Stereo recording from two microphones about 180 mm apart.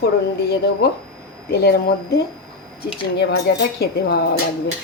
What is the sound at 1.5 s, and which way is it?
A woman's voice, 60° left (ahead or behind).